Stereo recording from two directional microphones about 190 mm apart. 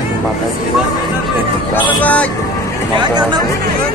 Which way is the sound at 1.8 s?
10° left (ahead or behind).